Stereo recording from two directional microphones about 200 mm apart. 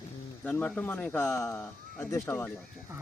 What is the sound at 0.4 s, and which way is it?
Speech, 5° left (ahead or behind).